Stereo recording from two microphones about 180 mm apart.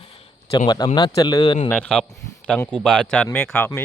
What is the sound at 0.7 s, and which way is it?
Speech, 25° left (ahead or behind).